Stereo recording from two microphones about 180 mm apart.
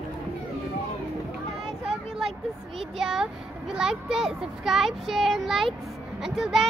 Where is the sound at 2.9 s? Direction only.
Centre (ahead or behind).